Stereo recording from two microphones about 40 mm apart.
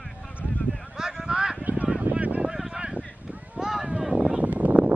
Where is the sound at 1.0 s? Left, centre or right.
Centre.